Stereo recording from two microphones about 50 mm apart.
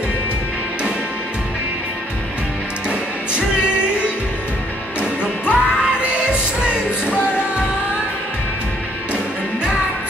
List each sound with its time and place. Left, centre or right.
2.9 s music: right
5.2 s music: right